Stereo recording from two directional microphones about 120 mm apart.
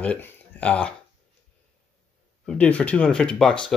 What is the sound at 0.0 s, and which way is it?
Speech, 10° left (ahead or behind).